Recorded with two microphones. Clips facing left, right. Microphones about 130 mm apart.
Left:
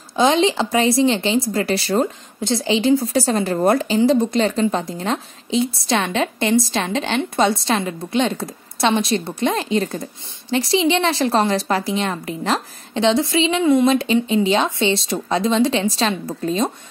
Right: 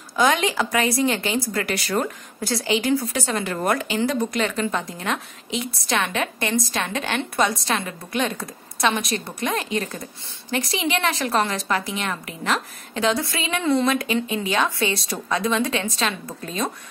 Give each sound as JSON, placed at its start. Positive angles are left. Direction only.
{"t": 0.1, "sound": "a woman's voice", "side_deg": 25}
{"t": 13.8, "sound": "a woman's voice", "side_deg": 30}